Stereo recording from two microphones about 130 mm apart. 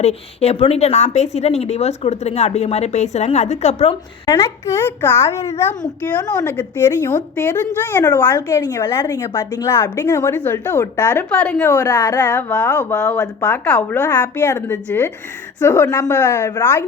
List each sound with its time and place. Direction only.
0.0 s a woman's voice: 55° left (ahead or behind)
4.3 s a woman's voice: 25° left (ahead or behind)
8.8 s a woman's voice: 35° left (ahead or behind)
10.2 s a woman's voice: 15° left (ahead or behind)
11.5 s a woman's voice: 25° left (ahead or behind)
13.7 s a woman's voice: 10° left (ahead or behind)